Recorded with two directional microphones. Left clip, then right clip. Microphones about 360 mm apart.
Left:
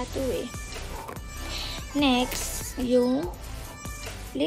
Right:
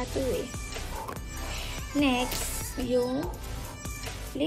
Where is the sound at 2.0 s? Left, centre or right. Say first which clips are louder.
Left 3 dB; centre.